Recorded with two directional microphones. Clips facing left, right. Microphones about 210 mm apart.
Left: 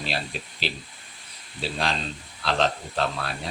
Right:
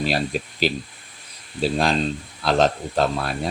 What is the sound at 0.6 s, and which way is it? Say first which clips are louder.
Speech: right 10 dB; 45° right (ahead or behind).